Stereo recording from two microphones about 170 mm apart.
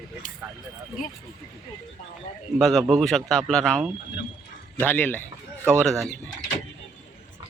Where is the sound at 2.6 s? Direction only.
Centre (ahead or behind).